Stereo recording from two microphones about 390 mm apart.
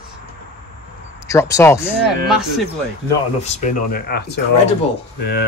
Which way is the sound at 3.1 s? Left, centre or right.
Centre.